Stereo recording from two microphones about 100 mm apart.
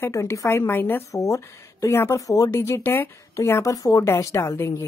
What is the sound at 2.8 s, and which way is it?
A woman's voice, 20° left (ahead or behind).